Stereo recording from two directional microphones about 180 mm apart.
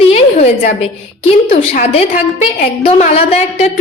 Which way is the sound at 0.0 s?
40° left (ahead or behind).